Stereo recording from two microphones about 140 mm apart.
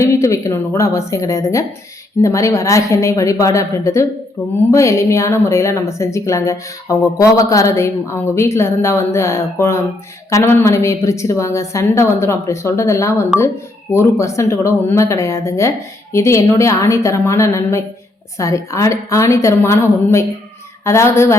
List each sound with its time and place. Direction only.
0.0 s a woman's voice: 20° left (ahead or behind)